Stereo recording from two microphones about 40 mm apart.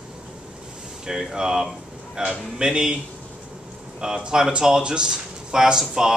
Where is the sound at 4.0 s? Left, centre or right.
Centre.